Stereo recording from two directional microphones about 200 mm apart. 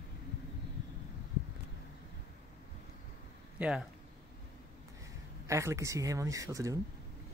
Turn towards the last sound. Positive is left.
turn(degrees=-15)  # may be behind; listen again after turning